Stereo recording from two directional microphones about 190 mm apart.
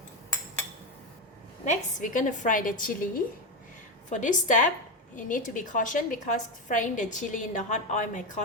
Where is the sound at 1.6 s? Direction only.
45° left (ahead or behind).